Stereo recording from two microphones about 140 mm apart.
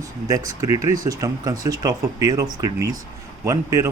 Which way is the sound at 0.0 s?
25° right (ahead or behind).